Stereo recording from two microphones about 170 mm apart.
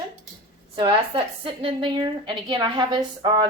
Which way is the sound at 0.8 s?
30° right (ahead or behind).